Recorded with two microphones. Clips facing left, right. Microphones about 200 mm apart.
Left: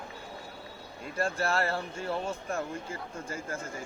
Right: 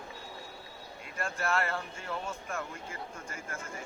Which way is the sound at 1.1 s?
35° left (ahead or behind).